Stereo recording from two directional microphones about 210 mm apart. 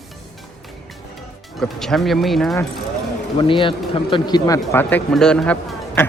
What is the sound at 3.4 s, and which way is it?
Speech, 25° left (ahead or behind).